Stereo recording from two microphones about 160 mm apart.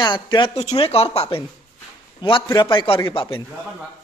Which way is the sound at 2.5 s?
25° left (ahead or behind).